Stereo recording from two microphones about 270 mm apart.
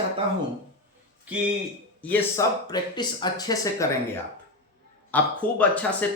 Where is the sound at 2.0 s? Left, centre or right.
Centre.